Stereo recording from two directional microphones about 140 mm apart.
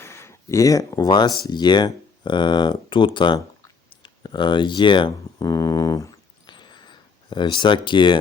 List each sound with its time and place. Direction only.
0.0 s speech: 20° left (ahead or behind)